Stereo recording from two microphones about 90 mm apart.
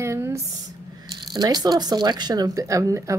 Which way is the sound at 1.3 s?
50° right (ahead or behind).